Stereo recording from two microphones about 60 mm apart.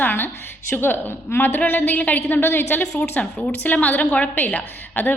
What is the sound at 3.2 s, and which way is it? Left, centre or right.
A woman's voice, left.